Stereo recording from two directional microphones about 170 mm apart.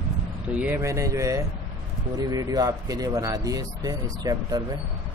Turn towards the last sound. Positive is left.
turn(degrees=-20)  # may be behind; listen again after turning